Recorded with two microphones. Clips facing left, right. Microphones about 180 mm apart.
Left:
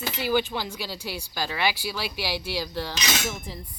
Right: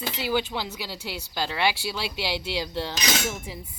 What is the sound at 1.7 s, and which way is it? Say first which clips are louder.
Speech: right 1 dB; 25° right (ahead or behind).